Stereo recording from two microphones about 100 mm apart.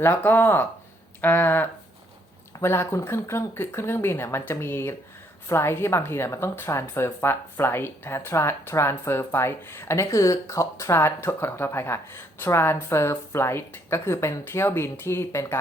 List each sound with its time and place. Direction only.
0.0 s speech: 20° left (ahead or behind)